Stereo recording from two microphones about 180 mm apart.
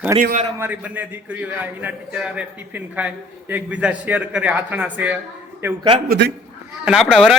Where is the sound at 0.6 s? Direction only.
10° right (ahead or behind).